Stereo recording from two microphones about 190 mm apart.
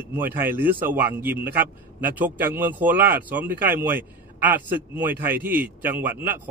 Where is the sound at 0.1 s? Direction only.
10° right (ahead or behind).